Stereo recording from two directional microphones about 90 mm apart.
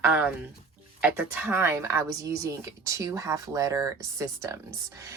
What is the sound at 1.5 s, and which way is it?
Speech, 25° right (ahead or behind).